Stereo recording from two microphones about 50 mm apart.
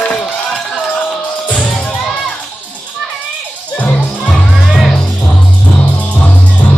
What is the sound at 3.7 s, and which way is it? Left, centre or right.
Music, left.